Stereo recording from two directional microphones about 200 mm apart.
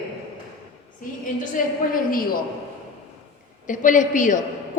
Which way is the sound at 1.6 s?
40° left (ahead or behind).